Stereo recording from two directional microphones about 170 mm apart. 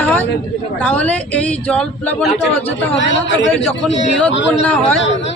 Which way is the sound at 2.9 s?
90° left.